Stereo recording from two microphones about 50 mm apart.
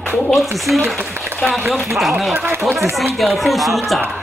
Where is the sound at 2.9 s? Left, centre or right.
Centre.